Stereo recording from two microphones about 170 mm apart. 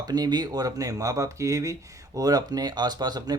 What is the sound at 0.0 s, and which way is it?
Speech, 25° right (ahead or behind).